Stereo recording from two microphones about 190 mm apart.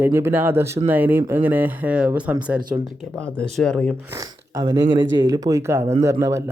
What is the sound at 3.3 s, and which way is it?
Speech, 5° left (ahead or behind).